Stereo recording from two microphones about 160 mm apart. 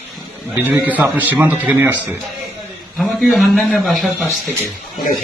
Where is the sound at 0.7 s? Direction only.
10° right (ahead or behind).